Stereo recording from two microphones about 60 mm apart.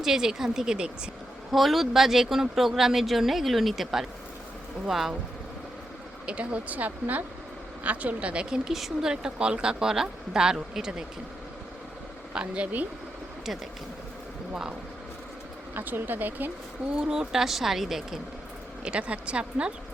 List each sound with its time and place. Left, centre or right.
0.0 s speech: centre
1.5 s speech: centre
6.2 s speech: right
12.3 s speech: centre
15.7 s speech: right
16.9 s speech: centre
18.9 s speech: centre